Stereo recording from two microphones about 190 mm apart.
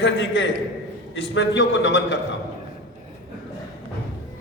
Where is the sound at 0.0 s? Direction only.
70° left (ahead or behind).